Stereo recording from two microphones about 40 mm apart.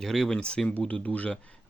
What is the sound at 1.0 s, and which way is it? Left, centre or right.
Speech, left.